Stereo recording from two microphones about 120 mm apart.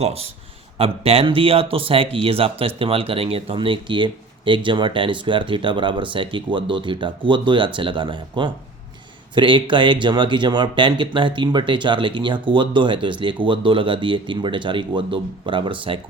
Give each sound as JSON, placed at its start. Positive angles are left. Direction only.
{"t": 0.0, "sound": "speech", "side_deg": -60}